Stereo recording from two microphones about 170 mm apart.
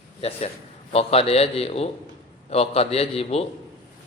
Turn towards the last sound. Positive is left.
turn(degrees=35)  # may be behind; listen again after turning